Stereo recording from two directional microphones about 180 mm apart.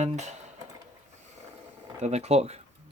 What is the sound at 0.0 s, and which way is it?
Speech, 40° right (ahead or behind).